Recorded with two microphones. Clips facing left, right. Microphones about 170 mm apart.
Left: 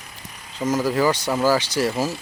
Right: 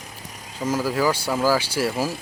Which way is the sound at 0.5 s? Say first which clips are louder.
Left 2 dB; 10° right (ahead or behind).